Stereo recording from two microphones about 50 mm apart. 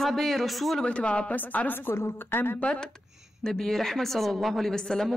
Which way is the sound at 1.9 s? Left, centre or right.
Left.